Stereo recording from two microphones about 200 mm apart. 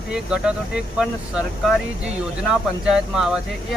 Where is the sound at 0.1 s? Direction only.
5° right (ahead or behind).